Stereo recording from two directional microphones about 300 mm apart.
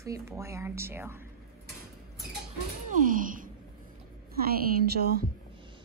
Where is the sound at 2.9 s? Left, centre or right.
Right.